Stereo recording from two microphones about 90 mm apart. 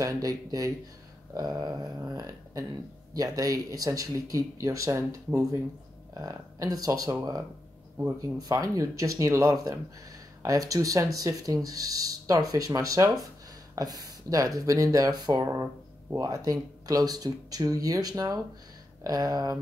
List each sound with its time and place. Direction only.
0.0 s speech: 40° right (ahead or behind)
8.4 s speech: 40° right (ahead or behind)
15.4 s speech: 25° right (ahead or behind)
16.2 s speech: 40° right (ahead or behind)